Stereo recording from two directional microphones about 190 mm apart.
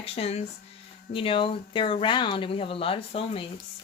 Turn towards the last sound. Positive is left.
turn(degrees=30)  # may be behind; listen again after turning